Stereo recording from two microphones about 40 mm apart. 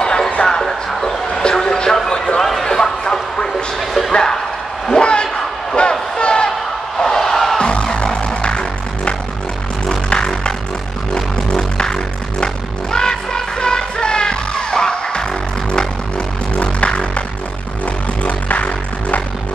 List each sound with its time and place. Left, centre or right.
0.4 s music: left
1.4 s a sound: centre
5.8 s train: left
7.0 s music: centre
7.5 s music: left
11.1 s a sound: centre
12.9 s music: centre
16.5 s music: left
18.2 s music: left